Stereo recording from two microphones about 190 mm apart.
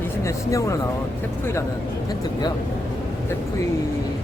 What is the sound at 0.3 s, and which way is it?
Speech, 15° left (ahead or behind).